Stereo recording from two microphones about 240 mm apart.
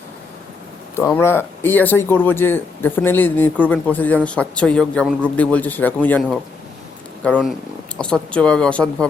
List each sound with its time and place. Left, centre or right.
0.9 s speech: centre
7.3 s speech: centre